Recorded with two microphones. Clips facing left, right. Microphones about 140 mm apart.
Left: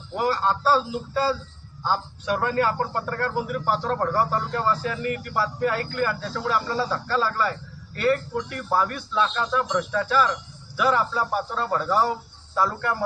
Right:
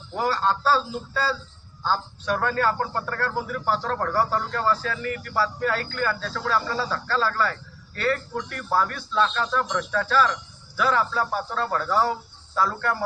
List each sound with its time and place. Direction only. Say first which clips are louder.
0.2 s speech: even; 15° left (ahead or behind)